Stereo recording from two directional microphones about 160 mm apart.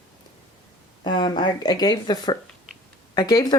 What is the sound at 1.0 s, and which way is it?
Speech, 30° left (ahead or behind).